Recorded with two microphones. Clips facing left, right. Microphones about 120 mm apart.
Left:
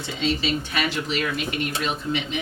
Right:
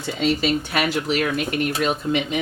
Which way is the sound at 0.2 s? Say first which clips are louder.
Right 4 dB; 45° right (ahead or behind).